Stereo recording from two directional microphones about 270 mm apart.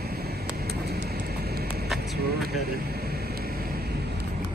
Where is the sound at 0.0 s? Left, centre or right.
Right.